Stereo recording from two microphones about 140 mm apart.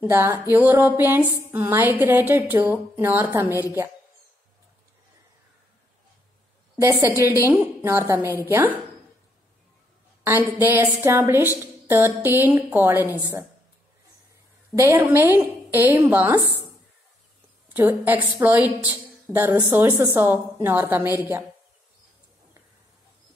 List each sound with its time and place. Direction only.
0.0 s a woman's voice: 15° right (ahead or behind)
6.8 s a woman's voice: 20° right (ahead or behind)
10.2 s a woman's voice: 15° right (ahead or behind)
14.8 s a woman's voice: 15° right (ahead or behind)
17.7 s a woman's voice: 15° right (ahead or behind)